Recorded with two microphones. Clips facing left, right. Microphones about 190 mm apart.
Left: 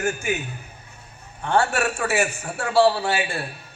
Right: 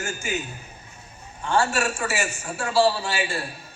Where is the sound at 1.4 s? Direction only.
60° left (ahead or behind).